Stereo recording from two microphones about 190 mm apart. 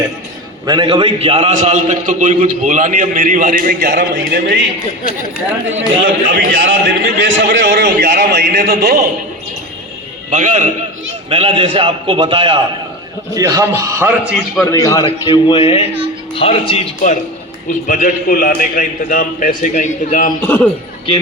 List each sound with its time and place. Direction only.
0.6 s a man's voice: 25° right (ahead or behind); by 4.6 s 60° right (ahead or behind)
6.2 s a man's voice: 65° right (ahead or behind)
10.3 s a man's voice: 40° right (ahead or behind); by 14.6 s 5° right (ahead or behind)
15.0 s a man's voice: 25° left (ahead or behind); by 20.3 s 45° left (ahead or behind)
20.4 s a man's voice: 10° left (ahead or behind)